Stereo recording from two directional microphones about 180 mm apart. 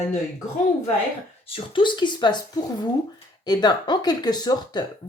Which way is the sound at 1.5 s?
25° left (ahead or behind).